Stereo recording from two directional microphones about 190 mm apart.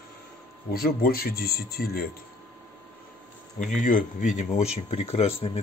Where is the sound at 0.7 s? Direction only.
50° left (ahead or behind).